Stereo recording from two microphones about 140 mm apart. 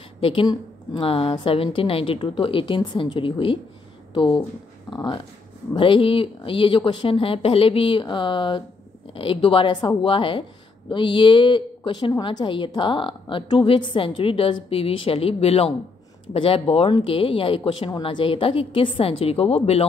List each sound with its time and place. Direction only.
0.2 s a woman's voice: 35° left (ahead or behind)